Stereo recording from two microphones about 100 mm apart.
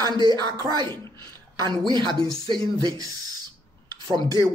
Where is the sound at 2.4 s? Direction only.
45° right (ahead or behind).